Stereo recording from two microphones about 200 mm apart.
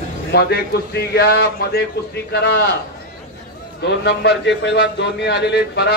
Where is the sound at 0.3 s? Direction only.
55° left (ahead or behind).